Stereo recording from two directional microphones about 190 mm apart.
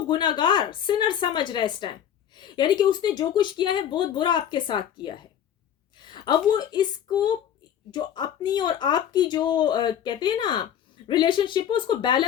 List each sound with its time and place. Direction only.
0.1 s speech: 25° left (ahead or behind)
6.0 s a sound: 25° left (ahead or behind)
6.5 s speech: 20° left (ahead or behind)